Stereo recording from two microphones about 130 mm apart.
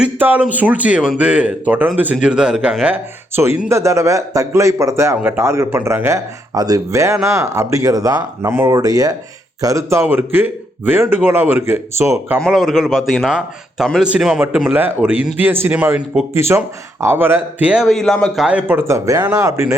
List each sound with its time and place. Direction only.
0.0 s speech: 15° right (ahead or behind)
12.4 s a man's voice: centre (ahead or behind)
14.7 s speech: 15° right (ahead or behind)
17.8 s a man's voice: 5° left (ahead or behind)
18.4 s speech: 15° right (ahead or behind)